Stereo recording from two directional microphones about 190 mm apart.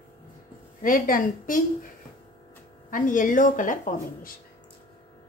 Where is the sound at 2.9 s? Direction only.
45° left (ahead or behind).